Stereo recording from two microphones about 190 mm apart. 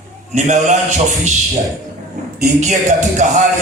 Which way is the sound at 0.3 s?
40° right (ahead or behind).